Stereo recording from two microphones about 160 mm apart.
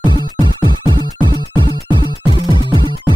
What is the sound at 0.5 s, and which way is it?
Music, 25° left (ahead or behind).